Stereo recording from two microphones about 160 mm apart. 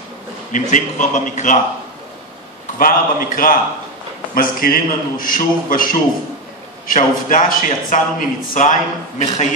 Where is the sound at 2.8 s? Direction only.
60° left (ahead or behind).